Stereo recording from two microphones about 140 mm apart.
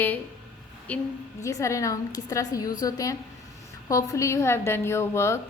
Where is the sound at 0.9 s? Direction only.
10° left (ahead or behind).